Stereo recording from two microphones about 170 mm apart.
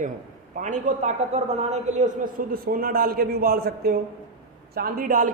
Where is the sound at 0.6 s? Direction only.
45° right (ahead or behind).